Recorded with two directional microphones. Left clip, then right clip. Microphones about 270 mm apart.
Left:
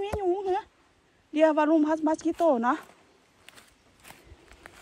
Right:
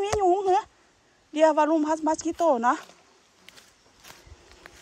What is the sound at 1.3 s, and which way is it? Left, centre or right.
A woman's voice, centre.